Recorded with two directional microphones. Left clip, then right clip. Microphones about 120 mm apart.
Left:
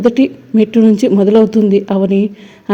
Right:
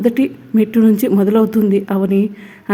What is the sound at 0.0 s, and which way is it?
A woman's voice, 25° left (ahead or behind).